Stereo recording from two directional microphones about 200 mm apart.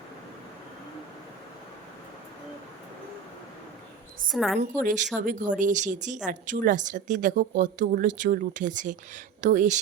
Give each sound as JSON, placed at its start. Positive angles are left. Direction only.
{"t": 4.3, "sound": "a woman's voice", "side_deg": 0}
{"t": 4.6, "sound": "a woman's voice", "side_deg": -40}